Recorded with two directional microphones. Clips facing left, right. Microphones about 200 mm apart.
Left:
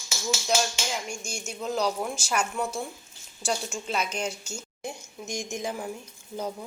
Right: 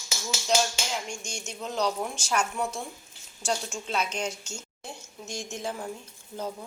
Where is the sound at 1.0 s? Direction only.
5° left (ahead or behind).